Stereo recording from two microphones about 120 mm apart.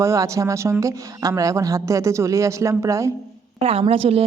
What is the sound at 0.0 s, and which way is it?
Speech, 25° right (ahead or behind).